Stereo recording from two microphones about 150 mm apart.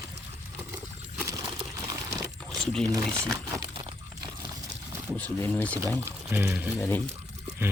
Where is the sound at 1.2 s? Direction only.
20° right (ahead or behind).